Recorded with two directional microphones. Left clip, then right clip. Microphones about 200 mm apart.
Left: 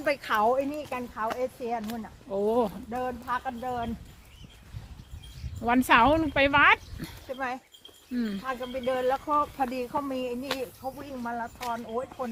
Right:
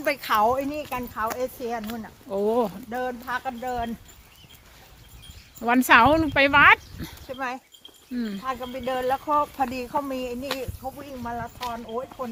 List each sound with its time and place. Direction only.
0.0 s speech: 55° right (ahead or behind)
2.3 s speech: 20° right (ahead or behind)
2.9 s speech: 55° right (ahead or behind)
5.5 s speech: 20° right (ahead or behind)
7.3 s speech: 55° right (ahead or behind)
8.1 s speech: 5° right (ahead or behind)
8.4 s speech: 55° right (ahead or behind)
10.6 s speech: 35° right (ahead or behind)
11.6 s speech: 20° right (ahead or behind)